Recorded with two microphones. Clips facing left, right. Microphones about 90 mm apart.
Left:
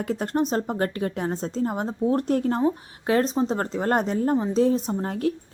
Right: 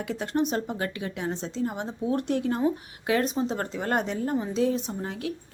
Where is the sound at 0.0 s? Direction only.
40° left (ahead or behind).